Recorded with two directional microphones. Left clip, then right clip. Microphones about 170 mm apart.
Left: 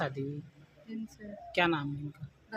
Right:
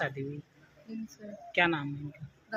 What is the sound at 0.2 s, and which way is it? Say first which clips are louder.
Speech: even; 20° left (ahead or behind).